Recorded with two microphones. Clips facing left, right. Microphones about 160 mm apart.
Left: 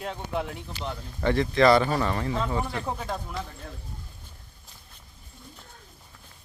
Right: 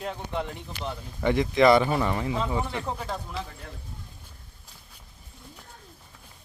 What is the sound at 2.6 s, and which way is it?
Speech, centre (ahead or behind).